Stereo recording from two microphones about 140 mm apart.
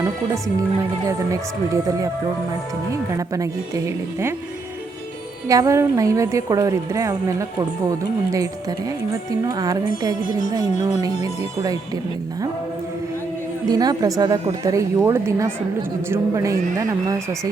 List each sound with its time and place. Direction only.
1.0 s speech: 25° right (ahead or behind)
5.5 s speech: 25° right (ahead or behind)
9.5 s speech: 25° right (ahead or behind)
11.2 s speech: 25° right (ahead or behind)
13.7 s speech: 25° right (ahead or behind)